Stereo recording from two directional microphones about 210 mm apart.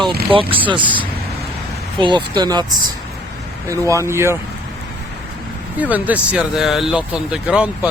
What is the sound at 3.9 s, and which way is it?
Speech, 15° right (ahead or behind).